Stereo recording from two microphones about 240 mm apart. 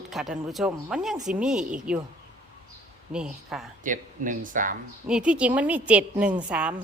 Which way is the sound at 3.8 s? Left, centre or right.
Right.